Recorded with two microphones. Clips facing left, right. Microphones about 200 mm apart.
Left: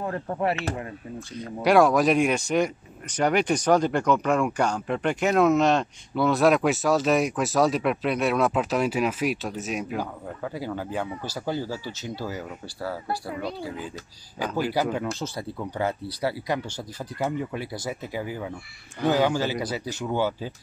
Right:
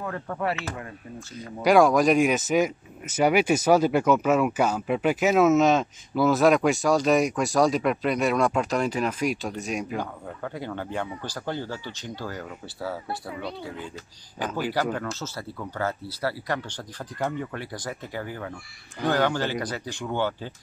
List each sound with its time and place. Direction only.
0.0 s speech: 30° left (ahead or behind)
1.3 s speech: centre (ahead or behind)
14.7 s speech: 15° left (ahead or behind)